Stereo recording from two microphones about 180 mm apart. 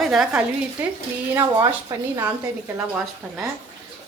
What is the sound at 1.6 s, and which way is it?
A woman's voice, 20° right (ahead or behind).